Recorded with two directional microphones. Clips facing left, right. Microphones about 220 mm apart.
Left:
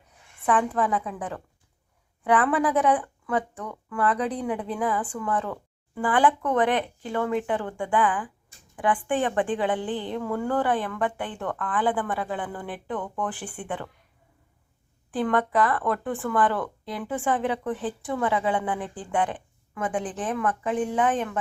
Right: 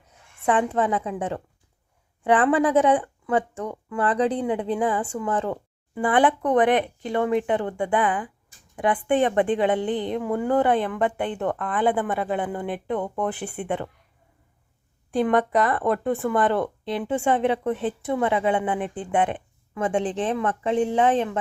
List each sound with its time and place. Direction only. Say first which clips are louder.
0.4 s speech: right 2 dB; 25° right (ahead or behind)
15.1 s speech: right 3 dB; 25° right (ahead or behind)